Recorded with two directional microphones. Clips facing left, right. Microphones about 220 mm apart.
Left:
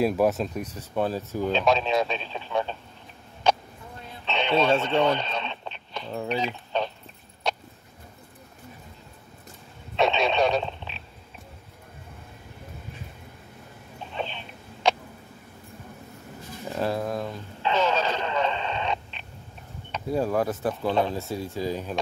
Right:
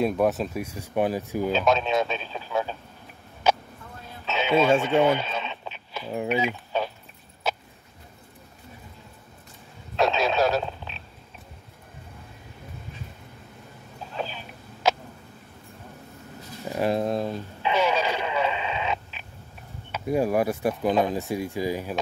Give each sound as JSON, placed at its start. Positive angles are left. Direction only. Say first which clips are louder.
{"t": 0.0, "sound": "speech", "louder": "even", "side_deg": 0}
{"t": 1.5, "sound": "speech", "louder": "even", "side_deg": 0}
{"t": 3.4, "sound": "a sound", "louder": "even", "side_deg": -5}
{"t": 4.3, "sound": "speech", "louder": "right 2 dB", "side_deg": -5}
{"t": 7.5, "sound": "a sound", "louder": "even", "side_deg": -5}
{"t": 9.9, "sound": "radio", "louder": "even", "side_deg": 0}
{"t": 14.1, "sound": "a sound", "louder": "even", "side_deg": -5}
{"t": 16.6, "sound": "pigeon", "louder": "right 3 dB", "side_deg": -15}
{"t": 17.6, "sound": "radio", "louder": "even", "side_deg": -10}
{"t": 19.9, "sound": "speech", "louder": "right 2 dB", "side_deg": -10}